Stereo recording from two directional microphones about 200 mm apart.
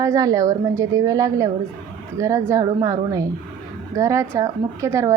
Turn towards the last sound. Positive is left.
turn(degrees=-15)  # may be behind; listen again after turning